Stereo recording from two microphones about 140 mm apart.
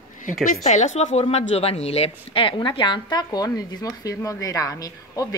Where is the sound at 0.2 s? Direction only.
70° left (ahead or behind).